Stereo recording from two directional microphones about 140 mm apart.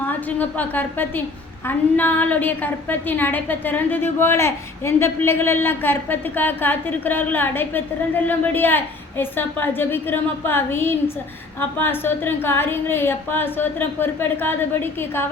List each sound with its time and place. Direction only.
0.1 s a woman's voice: 10° left (ahead or behind)